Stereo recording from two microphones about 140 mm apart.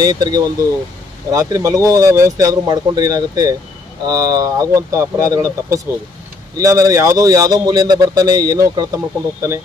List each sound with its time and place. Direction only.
0.0 s speech: 30° right (ahead or behind)